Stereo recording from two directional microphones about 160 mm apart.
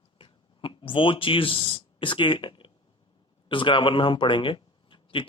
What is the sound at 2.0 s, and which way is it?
Speech, 30° left (ahead or behind).